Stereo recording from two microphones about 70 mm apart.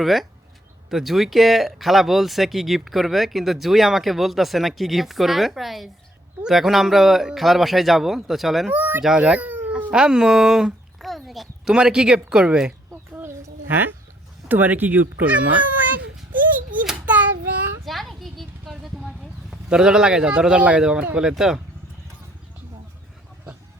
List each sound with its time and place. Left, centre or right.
0.0 s speech: centre
8.7 s speech: right
9.0 s speech: centre
9.9 s a child's voice: centre
12.9 s a sound: right
13.7 s speech: right
16.7 s hands: right
17.1 s child singing: right
17.8 s a sound: centre
21.2 s speech: centre